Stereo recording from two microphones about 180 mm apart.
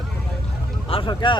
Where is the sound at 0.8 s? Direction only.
30° left (ahead or behind).